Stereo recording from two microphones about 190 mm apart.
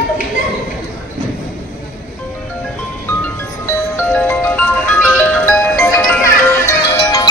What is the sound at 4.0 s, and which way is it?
Music, 10° left (ahead or behind).